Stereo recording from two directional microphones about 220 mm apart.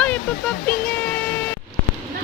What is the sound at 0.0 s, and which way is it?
Music, 5° left (ahead or behind).